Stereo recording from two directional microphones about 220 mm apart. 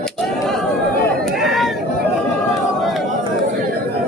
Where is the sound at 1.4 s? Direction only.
Centre (ahead or behind).